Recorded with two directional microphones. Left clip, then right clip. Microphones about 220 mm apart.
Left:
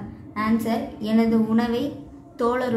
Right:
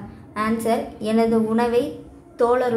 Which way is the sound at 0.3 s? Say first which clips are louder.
Right 3 dB; 25° right (ahead or behind).